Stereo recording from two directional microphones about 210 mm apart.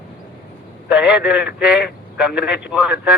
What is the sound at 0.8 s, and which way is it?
A man's voice, 5° right (ahead or behind).